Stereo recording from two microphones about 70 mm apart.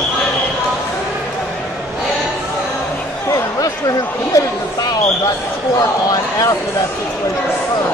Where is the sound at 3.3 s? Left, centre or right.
Left.